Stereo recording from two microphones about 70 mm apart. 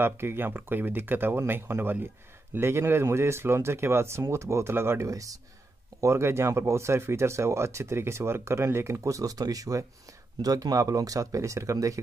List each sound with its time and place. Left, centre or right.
0.0 s speech: right
5.9 s speech: right